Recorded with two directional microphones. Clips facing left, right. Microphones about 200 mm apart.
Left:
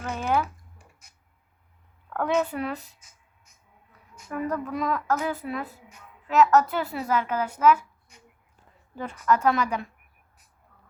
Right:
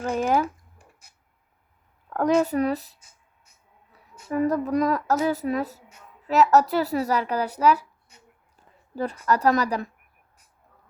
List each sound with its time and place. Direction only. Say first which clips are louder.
0.1 s a sound: right 3 dB; 40° right (ahead or behind)
2.0 s speech: right 4 dB; 35° right (ahead or behind)
4.3 s speech: right 6 dB; 40° right (ahead or behind)
9.0 s speech: right 1 dB; 35° right (ahead or behind)